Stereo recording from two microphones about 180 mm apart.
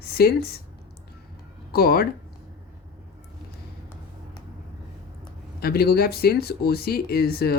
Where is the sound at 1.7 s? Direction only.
55° left (ahead or behind).